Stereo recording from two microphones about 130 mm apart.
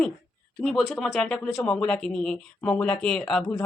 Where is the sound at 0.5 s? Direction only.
Centre (ahead or behind).